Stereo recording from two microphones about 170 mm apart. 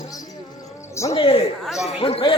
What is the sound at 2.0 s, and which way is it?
Chatter, 35° left (ahead or behind).